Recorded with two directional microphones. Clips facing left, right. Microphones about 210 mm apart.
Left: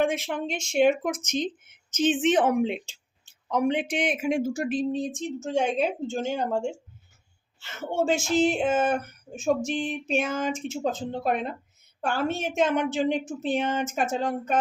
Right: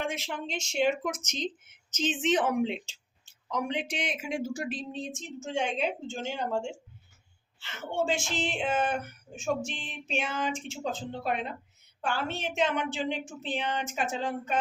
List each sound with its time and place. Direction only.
0.0 s speech: 55° left (ahead or behind)
7.6 s speech: 40° left (ahead or behind)